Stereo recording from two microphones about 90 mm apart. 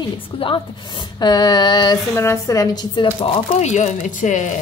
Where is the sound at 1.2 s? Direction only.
50° left (ahead or behind).